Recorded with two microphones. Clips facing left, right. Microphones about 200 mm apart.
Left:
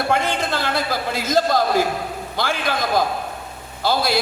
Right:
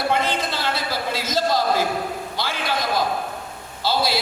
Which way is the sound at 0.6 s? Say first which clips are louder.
Left 3 dB; 50° left (ahead or behind).